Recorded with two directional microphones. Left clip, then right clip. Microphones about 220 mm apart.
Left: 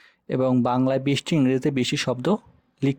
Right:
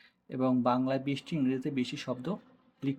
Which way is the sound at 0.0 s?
45° left (ahead or behind).